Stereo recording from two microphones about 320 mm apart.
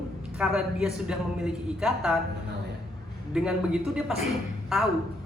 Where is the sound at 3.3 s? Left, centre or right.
Centre.